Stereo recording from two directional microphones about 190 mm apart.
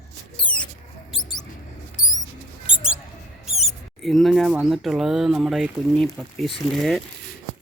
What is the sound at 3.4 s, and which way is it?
Speech, centre (ahead or behind).